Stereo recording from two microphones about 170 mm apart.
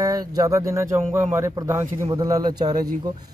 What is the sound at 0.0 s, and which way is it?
Speech, 20° right (ahead or behind).